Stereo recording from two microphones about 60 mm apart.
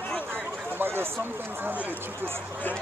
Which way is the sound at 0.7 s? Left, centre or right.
Right.